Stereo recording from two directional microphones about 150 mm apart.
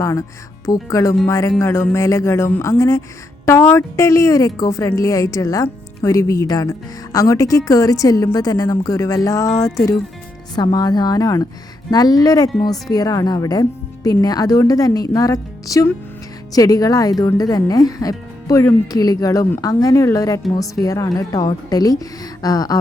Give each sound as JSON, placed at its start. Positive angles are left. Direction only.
{"t": 0.0, "sound": "a woman's voice", "side_deg": 20}